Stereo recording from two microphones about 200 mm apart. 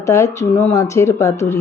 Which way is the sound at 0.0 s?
15° left (ahead or behind).